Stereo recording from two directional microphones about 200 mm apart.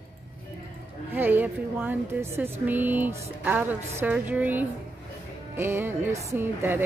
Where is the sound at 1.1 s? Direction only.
10° right (ahead or behind).